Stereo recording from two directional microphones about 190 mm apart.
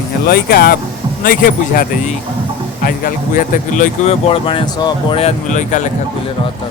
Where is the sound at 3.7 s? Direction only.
40° left (ahead or behind).